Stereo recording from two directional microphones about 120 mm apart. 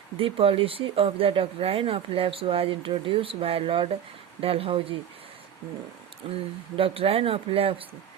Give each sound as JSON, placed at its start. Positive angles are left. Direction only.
{"t": 0.2, "sound": "speech", "side_deg": -50}
{"t": 6.3, "sound": "speech", "side_deg": -50}